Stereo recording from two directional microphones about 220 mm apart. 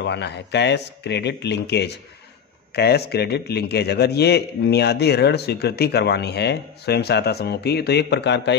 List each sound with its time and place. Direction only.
0.0 s a man's voice: 50° left (ahead or behind)